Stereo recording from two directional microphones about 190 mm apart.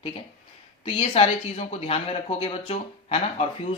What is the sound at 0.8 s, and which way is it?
Speech, 30° left (ahead or behind).